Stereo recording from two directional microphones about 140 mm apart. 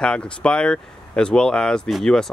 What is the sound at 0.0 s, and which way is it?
Speech, 5° left (ahead or behind).